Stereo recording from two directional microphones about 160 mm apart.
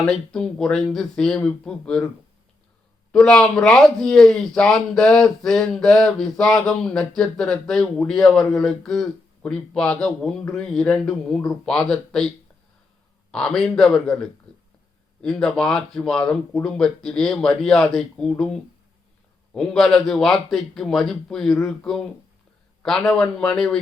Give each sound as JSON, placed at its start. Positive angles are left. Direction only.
{"t": 0.0, "sound": "speech", "side_deg": 5}
{"t": 3.1, "sound": "speech", "side_deg": 5}
{"t": 13.3, "sound": "speech", "side_deg": 5}
{"t": 14.5, "sound": "a sound", "side_deg": -25}
{"t": 15.2, "sound": "speech", "side_deg": 5}